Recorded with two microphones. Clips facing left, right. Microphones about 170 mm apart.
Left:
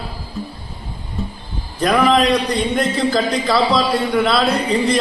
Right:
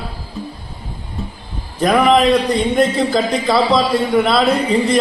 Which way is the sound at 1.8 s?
20° right (ahead or behind).